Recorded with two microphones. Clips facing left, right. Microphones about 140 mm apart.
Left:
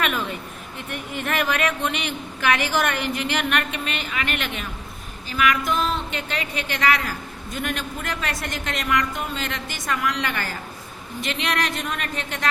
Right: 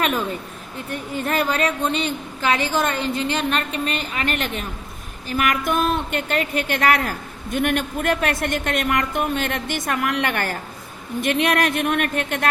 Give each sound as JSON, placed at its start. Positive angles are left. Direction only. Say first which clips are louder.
{"t": 0.9, "sound": "a woman's voice", "louder": "right 3 dB", "side_deg": -35}